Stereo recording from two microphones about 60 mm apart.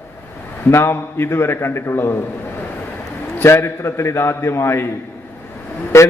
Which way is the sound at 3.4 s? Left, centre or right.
Left.